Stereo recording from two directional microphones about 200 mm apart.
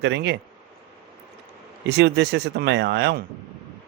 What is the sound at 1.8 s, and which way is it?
Speech, 55° right (ahead or behind).